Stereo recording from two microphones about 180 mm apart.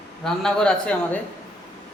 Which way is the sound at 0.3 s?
5° left (ahead or behind).